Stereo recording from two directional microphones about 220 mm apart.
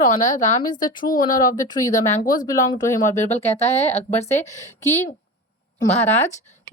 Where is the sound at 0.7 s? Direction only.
20° left (ahead or behind).